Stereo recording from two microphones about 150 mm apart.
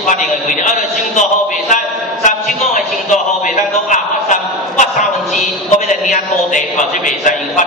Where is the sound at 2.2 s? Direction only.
55° left (ahead or behind).